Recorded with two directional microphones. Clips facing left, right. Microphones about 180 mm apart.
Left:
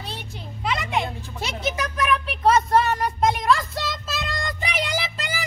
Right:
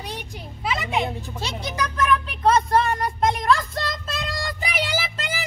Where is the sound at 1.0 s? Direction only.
20° right (ahead or behind).